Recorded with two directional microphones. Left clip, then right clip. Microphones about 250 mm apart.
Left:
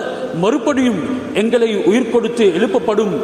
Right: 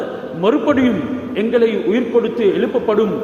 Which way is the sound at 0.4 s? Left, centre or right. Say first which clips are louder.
Right 1 dB; left.